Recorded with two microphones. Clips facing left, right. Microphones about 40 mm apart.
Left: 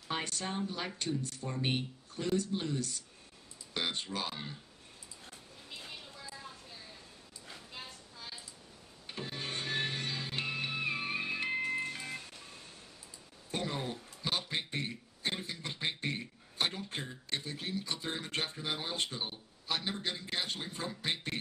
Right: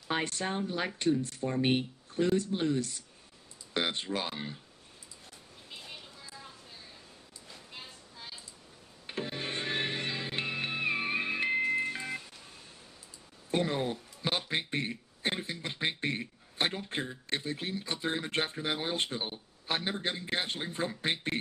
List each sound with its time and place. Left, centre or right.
0.1 s speech: right
9.0 s music: right
13.5 s a sound: right